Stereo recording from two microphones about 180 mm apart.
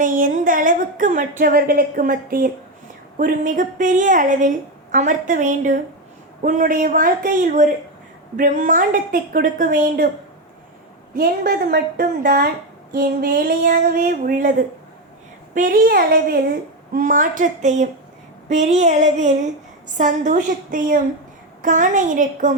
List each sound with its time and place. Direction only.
0.0 s a woman's voice: 50° right (ahead or behind)
11.1 s a woman's voice: 55° right (ahead or behind)
15.5 s a woman's voice: 50° right (ahead or behind)
16.9 s a woman's voice: 45° right (ahead or behind)
18.4 s a sound: 40° right (ahead or behind)
20.0 s a woman's voice: 45° right (ahead or behind)